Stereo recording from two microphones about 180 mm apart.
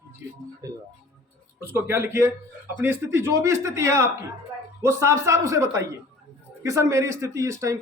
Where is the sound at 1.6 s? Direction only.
15° right (ahead or behind).